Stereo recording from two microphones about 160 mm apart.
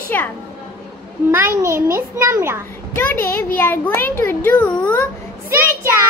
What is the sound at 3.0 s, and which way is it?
A child's voice, 15° left (ahead or behind).